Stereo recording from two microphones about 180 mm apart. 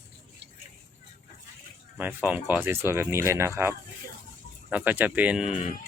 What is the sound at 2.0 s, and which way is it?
Speech, 10° right (ahead or behind).